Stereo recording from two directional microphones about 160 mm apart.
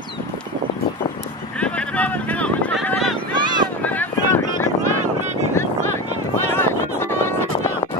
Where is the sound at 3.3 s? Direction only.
30° right (ahead or behind).